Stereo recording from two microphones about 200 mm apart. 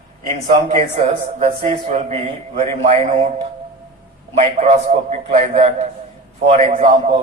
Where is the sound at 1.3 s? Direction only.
35° right (ahead or behind).